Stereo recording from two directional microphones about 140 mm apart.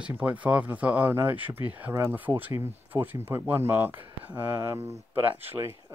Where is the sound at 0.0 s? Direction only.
10° right (ahead or behind).